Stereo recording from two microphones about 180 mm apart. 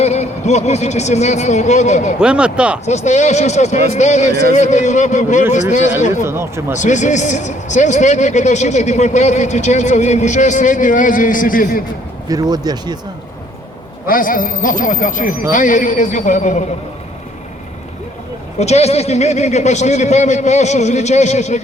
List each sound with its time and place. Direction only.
0.0 s a man's voice: 40° left (ahead or behind)
2.1 s speech: 5° right (ahead or behind)
2.8 s a man's voice: 40° left (ahead or behind)
6.2 s speech: 15° right (ahead or behind)
6.7 s a man's voice: 45° left (ahead or behind)
12.3 s speech: 20° right (ahead or behind)
14.1 s speech: 50° left (ahead or behind)
18.6 s a man's voice: 35° left (ahead or behind)